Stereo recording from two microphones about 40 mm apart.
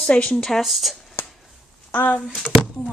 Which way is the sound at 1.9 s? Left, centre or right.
Left.